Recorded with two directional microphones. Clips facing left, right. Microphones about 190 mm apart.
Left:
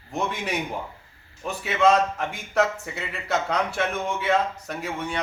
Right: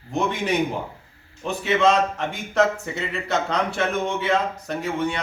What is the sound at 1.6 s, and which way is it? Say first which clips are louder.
A man's voice: right 1 dB; 5° left (ahead or behind).